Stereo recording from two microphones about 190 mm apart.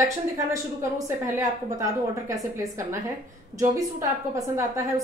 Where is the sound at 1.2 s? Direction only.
15° right (ahead or behind).